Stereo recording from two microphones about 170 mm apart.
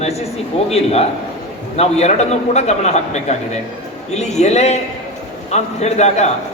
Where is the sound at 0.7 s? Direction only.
35° left (ahead or behind).